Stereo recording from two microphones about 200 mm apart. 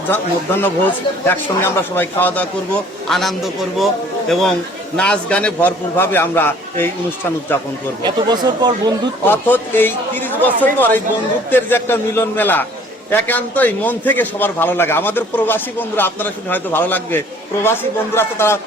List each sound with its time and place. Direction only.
0.1 s a man's voice: 10° left (ahead or behind)
8.0 s speech: 20° right (ahead or behind)
9.2 s a man's voice: 10° left (ahead or behind)